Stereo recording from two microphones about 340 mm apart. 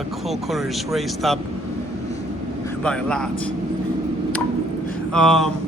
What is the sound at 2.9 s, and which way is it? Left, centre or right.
Speech, centre.